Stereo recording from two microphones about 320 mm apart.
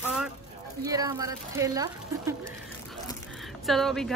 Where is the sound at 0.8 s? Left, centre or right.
Centre.